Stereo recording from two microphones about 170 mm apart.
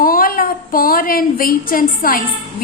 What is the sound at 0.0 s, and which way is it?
A woman's voice, 55° left (ahead or behind).